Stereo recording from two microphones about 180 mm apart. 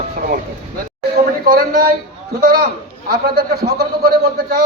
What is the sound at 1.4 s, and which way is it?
A man's voice, 55° right (ahead or behind).